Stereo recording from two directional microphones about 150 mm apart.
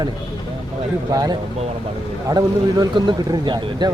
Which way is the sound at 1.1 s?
25° right (ahead or behind).